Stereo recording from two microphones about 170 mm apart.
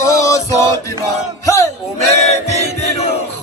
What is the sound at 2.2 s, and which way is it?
Chant, 40° left (ahead or behind).